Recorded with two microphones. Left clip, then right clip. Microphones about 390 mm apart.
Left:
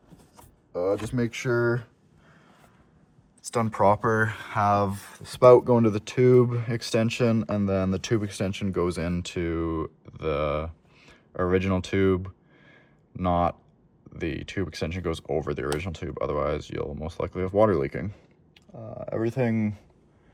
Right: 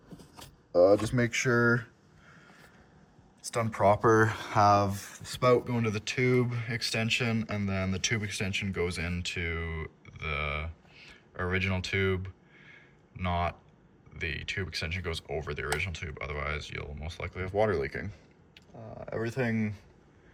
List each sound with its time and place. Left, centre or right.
0.7 s speech: centre
3.4 s speech: centre
12.7 s a sound: centre
14.2 s speech: centre